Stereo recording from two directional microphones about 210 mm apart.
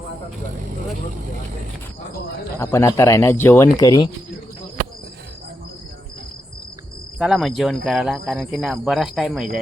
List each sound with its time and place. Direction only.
2.6 s speech: 15° left (ahead or behind)
7.2 s speech: centre (ahead or behind)